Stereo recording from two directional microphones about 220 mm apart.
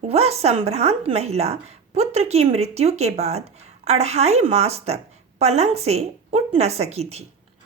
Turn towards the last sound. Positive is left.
turn(degrees=-30)  # may be behind; listen again after turning